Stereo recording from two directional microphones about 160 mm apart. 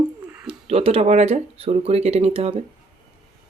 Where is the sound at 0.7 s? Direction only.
40° right (ahead or behind).